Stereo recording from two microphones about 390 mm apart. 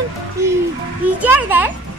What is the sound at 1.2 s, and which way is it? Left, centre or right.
Speech, centre.